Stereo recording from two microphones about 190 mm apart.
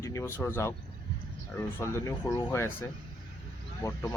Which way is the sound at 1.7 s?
15° left (ahead or behind).